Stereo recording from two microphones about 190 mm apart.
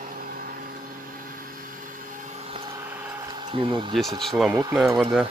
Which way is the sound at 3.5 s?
25° right (ahead or behind).